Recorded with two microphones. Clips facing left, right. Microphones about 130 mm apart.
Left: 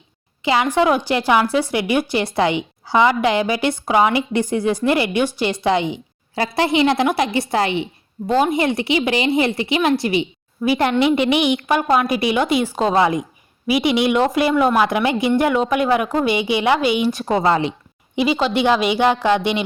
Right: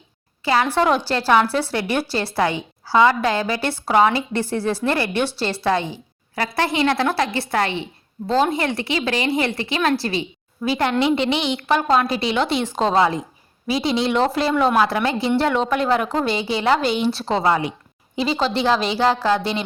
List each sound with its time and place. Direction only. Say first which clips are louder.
0.4 s a woman's voice: left 2 dB; 15° left (ahead or behind)
14.5 s speech: left 2 dB; 5° left (ahead or behind)
14.8 s a woman's voice: left 2 dB; 15° left (ahead or behind)
17.5 s a woman's voice: left 2 dB; 25° left (ahead or behind)
18.2 s a woman's voice: left 3 dB; 10° left (ahead or behind)